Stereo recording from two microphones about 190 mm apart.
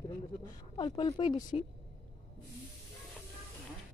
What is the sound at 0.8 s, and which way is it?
Speech, 25° left (ahead or behind).